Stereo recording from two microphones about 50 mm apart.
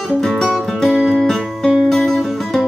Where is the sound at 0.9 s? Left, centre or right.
Centre.